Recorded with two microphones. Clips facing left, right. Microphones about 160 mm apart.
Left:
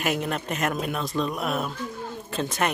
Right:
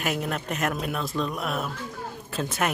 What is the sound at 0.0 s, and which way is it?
Speech, centre (ahead or behind).